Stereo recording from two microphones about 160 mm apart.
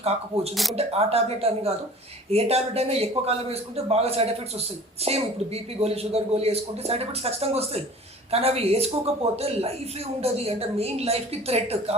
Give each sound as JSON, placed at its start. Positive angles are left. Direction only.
{"t": 0.0, "sound": "a man's voice", "side_deg": -40}
{"t": 0.5, "sound": "speech", "side_deg": 0}
{"t": 0.8, "sound": "a man's voice", "side_deg": -40}